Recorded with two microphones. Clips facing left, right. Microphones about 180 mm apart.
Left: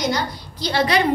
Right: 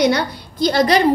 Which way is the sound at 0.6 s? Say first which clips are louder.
Right 5 dB; 40° right (ahead or behind).